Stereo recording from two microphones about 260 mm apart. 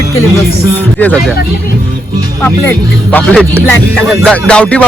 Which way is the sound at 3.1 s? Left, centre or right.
Centre.